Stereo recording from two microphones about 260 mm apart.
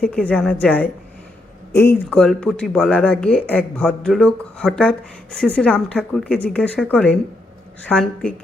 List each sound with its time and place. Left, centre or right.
0.0 s speech: centre